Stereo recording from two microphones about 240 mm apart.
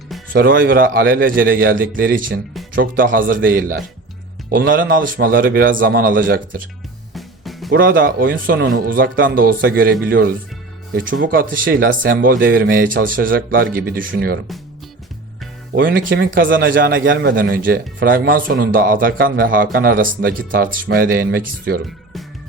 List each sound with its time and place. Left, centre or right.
0.3 s speech: right
7.1 s music: centre
7.7 s speech: right
15.7 s speech: right